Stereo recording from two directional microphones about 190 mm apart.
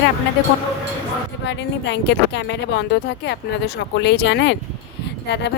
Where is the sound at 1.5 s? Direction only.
70° left (ahead or behind).